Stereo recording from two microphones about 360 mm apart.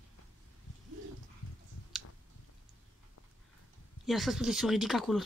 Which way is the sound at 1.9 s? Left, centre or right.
Centre.